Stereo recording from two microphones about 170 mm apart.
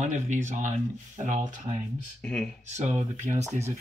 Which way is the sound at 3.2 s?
15° right (ahead or behind).